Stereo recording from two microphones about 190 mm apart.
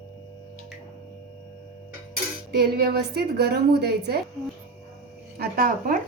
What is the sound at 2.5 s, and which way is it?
A woman's voice, 55° right (ahead or behind).